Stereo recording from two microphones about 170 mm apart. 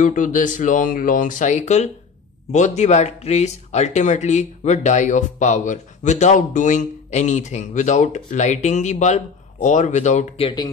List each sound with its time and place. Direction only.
0.0 s speech: 50° left (ahead or behind); by 10.7 s 30° left (ahead or behind)